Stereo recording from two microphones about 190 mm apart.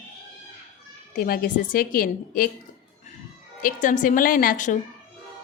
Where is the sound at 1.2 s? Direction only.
50° left (ahead or behind).